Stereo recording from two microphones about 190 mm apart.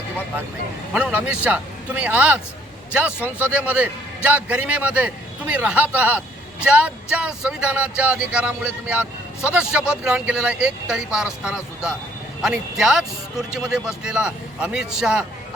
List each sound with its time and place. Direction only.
0.9 s a man's voice: 5° right (ahead or behind)